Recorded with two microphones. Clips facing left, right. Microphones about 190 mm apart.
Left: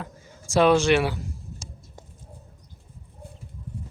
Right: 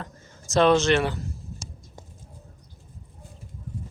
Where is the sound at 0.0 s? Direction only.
10° left (ahead or behind).